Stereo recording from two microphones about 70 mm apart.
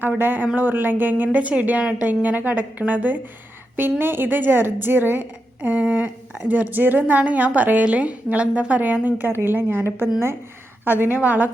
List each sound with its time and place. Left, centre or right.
0.2 s a woman's voice: right